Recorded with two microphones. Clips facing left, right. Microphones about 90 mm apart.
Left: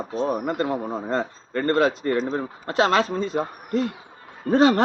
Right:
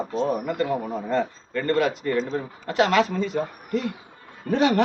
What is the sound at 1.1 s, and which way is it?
A man's voice, 40° left (ahead or behind).